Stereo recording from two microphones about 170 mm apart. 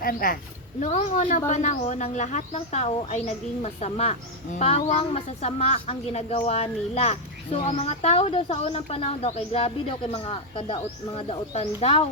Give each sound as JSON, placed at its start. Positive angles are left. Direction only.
{"t": 0.0, "sound": "a woman's voice", "side_deg": 55}
{"t": 0.8, "sound": "a woman's voice", "side_deg": 45}